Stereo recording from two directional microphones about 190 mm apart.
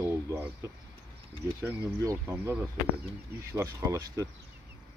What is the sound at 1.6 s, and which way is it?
Speech, 15° right (ahead or behind).